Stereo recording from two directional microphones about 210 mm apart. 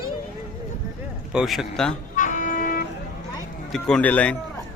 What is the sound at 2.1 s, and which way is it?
Music, 35° left (ahead or behind).